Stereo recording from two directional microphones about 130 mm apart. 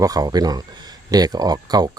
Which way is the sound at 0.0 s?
30° right (ahead or behind).